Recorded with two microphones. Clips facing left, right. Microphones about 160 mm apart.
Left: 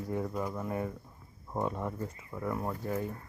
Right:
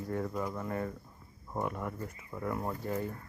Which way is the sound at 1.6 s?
25° left (ahead or behind).